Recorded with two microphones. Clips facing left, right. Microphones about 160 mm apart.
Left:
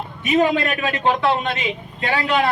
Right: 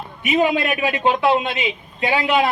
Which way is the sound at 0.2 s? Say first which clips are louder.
Left 1 dB; 15° right (ahead or behind).